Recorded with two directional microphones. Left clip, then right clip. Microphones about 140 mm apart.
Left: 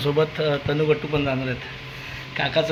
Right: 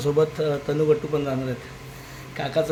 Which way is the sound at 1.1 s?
15° right (ahead or behind).